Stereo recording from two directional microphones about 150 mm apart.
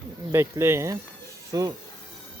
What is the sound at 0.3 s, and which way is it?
Speech, 15° right (ahead or behind).